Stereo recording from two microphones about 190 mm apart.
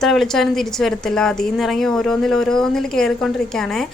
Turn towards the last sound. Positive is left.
turn(degrees=5)  # may be behind; listen again after turning